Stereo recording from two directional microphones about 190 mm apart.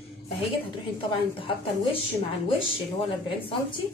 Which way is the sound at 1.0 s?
25° left (ahead or behind).